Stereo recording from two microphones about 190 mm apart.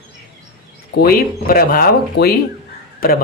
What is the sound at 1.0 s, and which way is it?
Speech, 50° left (ahead or behind).